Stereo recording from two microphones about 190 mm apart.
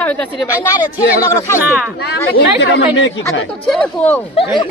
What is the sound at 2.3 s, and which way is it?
Speech, 65° left (ahead or behind).